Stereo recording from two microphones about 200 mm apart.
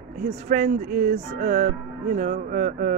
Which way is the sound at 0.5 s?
40° right (ahead or behind).